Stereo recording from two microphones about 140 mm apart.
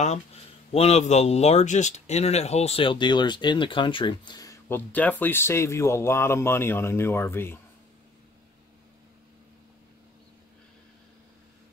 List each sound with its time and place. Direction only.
0.7 s speech: 50° left (ahead or behind); by 4.6 s 30° left (ahead or behind)
4.6 s speech: 10° left (ahead or behind)